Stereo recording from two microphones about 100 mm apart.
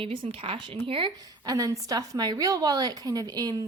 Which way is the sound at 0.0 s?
65° right (ahead or behind).